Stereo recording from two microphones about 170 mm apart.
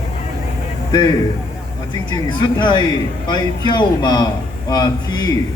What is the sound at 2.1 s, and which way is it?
A man's voice, 25° left (ahead or behind).